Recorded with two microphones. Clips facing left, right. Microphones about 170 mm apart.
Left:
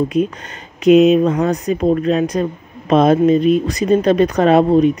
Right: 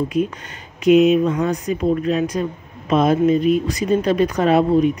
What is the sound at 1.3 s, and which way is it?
Speech, 40° left (ahead or behind).